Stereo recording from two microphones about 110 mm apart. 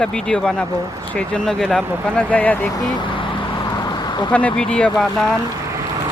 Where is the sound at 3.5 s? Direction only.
35° left (ahead or behind).